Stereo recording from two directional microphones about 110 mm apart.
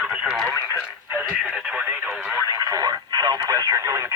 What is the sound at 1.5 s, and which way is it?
Speech, 15° right (ahead or behind).